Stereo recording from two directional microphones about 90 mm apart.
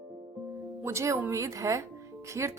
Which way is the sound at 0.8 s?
30° right (ahead or behind).